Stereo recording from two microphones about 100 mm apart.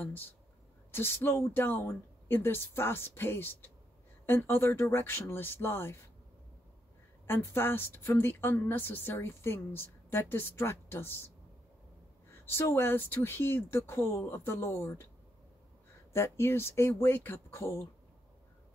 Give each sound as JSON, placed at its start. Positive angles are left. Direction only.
{"t": 0.0, "sound": "speech", "side_deg": 20}
{"t": 7.2, "sound": "speech", "side_deg": 25}
{"t": 12.4, "sound": "speech", "side_deg": 25}
{"t": 16.1, "sound": "speech", "side_deg": 25}